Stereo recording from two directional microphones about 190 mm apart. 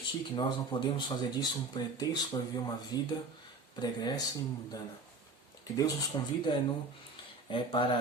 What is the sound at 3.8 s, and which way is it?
Speech, 20° left (ahead or behind).